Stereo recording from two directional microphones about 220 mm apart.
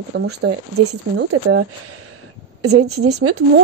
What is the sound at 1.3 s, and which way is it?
A woman's voice, 85° right.